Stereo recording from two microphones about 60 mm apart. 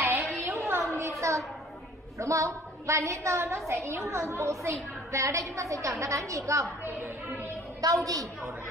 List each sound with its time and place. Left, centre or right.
0.0 s a sound: right
2.1 s a woman's voice: right
7.8 s a woman's voice: right